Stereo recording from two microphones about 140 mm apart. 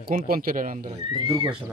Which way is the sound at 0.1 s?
90° right.